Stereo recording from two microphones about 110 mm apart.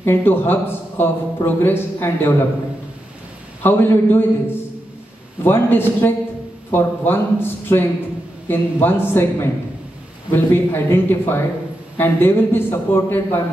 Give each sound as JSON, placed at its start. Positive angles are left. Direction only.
{"t": 0.0, "sound": "a man's voice", "side_deg": 20}
{"t": 3.6, "sound": "a man's voice", "side_deg": 20}